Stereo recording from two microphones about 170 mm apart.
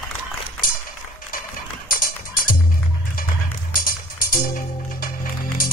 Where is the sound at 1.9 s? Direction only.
55° left (ahead or behind).